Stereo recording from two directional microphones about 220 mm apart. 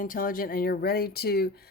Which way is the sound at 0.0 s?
40° left (ahead or behind).